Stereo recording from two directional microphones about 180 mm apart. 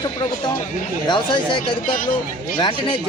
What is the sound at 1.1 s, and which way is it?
Speech, 25° left (ahead or behind).